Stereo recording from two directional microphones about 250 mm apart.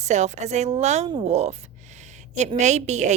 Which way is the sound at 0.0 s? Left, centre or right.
Right.